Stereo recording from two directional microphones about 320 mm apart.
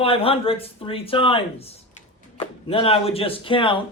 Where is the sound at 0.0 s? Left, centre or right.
Centre.